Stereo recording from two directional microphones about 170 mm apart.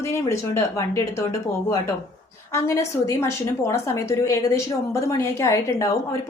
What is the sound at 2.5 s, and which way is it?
A woman's voice, 15° left (ahead or behind).